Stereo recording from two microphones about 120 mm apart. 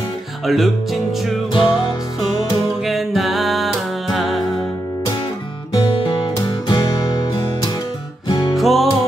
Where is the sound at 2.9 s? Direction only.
Centre (ahead or behind).